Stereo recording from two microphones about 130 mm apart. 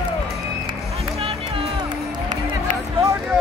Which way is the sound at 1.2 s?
45° right (ahead or behind).